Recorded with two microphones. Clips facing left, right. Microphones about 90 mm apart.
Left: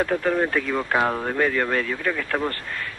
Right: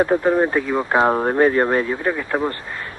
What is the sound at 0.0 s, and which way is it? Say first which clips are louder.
Speech: right 5 dB; 25° right (ahead or behind).